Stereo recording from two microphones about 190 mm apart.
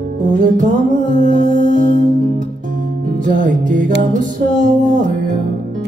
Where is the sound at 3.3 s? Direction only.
40° right (ahead or behind).